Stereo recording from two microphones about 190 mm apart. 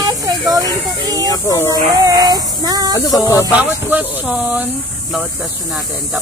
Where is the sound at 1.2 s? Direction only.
20° left (ahead or behind).